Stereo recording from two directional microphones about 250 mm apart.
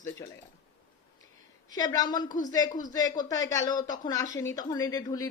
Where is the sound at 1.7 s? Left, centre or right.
Centre.